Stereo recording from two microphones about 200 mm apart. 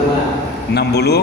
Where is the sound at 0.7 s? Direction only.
55° left (ahead or behind).